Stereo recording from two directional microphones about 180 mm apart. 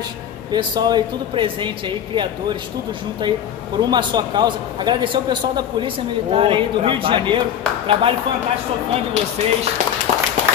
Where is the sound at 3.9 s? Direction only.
25° right (ahead or behind).